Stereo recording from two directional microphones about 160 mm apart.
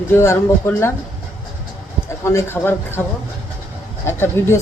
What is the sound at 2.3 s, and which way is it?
Speech, 15° left (ahead or behind).